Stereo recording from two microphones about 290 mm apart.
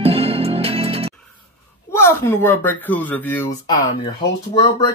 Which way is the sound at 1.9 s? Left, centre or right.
Centre.